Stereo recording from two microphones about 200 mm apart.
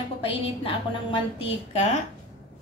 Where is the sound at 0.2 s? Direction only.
25° left (ahead or behind).